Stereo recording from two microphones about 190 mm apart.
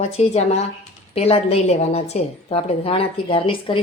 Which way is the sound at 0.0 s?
35° left (ahead or behind).